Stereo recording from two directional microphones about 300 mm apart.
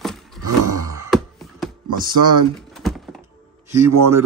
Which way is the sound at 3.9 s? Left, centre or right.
Right.